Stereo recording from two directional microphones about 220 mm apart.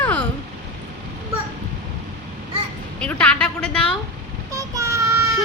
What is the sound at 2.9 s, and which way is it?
A woman's voice, 5° left (ahead or behind).